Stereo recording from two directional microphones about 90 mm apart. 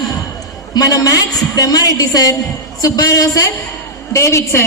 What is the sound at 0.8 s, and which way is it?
A woman's voice, 45° left (ahead or behind).